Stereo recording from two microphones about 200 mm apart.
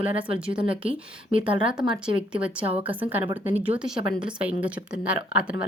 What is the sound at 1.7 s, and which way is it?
Speech, centre (ahead or behind).